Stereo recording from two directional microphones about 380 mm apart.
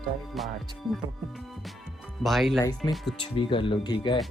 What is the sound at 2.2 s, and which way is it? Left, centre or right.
Speech, centre.